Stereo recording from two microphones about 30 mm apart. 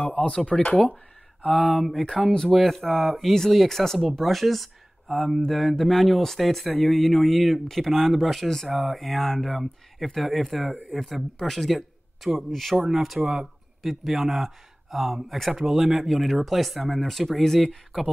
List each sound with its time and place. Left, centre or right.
0.0 s a sound: left
0.5 s speech: centre
1.6 s speech: centre
3.6 s speech: centre
4.2 s speech: centre
6.8 s speech: centre
12.8 s speech: centre
15.2 s speech: centre
15.5 s speech: centre